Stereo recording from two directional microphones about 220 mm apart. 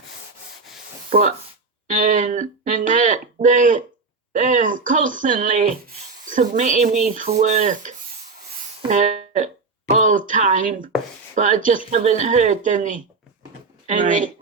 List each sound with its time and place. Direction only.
1.1 s speech: 25° right (ahead or behind)
1.9 s speech: 35° right (ahead or behind)